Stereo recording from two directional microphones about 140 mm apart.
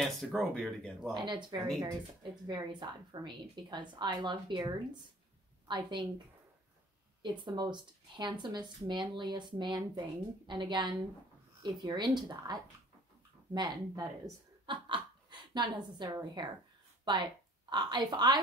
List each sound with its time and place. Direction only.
0.0 s speech: centre (ahead or behind)
1.1 s speech: 35° right (ahead or behind)
5.7 s a woman's voice: 35° right (ahead or behind)